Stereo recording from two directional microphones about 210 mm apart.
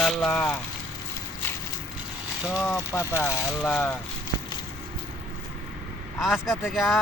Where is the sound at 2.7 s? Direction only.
15° left (ahead or behind).